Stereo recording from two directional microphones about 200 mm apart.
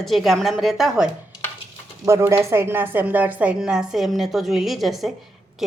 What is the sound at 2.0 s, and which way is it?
A woman's voice, 15° right (ahead or behind).